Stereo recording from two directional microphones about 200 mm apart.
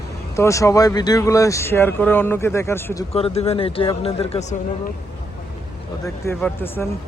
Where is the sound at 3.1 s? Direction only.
30° left (ahead or behind).